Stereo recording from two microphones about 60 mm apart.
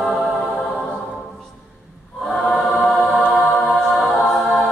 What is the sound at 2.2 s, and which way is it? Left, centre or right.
Choir, centre.